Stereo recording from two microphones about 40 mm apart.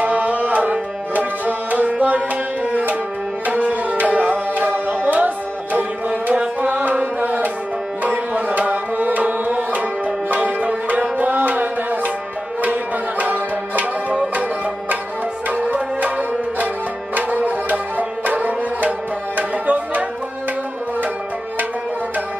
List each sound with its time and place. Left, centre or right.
0.0 s tabla: right
13.2 s music: right
15.5 s music: right